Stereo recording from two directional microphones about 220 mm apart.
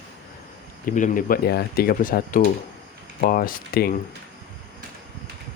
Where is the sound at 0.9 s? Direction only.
35° left (ahead or behind).